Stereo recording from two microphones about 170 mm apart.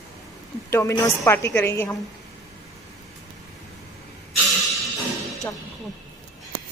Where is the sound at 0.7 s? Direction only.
15° left (ahead or behind).